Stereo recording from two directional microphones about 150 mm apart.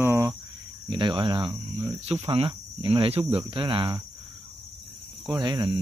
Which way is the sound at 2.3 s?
35° right (ahead or behind).